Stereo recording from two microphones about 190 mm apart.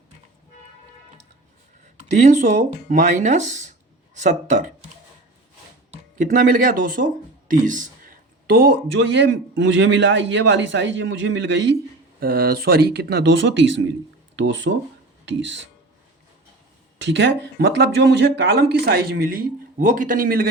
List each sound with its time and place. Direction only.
2.1 s speech: 40° right (ahead or behind)
5.9 s speech: 40° right (ahead or behind); by 11.7 s 70° right (ahead or behind)
12.2 s speech: 50° right (ahead or behind); by 15.7 s 70° right (ahead or behind)
17.0 s speech: 70° right (ahead or behind); by 20.5 s 50° right (ahead or behind)